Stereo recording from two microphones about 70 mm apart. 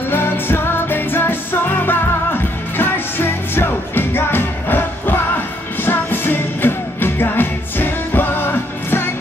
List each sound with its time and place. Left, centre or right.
0.1 s music: left